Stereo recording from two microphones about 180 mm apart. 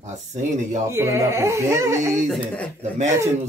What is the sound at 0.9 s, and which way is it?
Speech, 15° right (ahead or behind).